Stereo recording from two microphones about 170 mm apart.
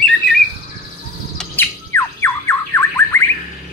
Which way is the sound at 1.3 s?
15° left (ahead or behind).